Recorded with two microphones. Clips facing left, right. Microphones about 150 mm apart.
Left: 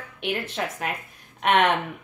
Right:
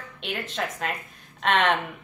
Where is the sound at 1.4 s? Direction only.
10° left (ahead or behind).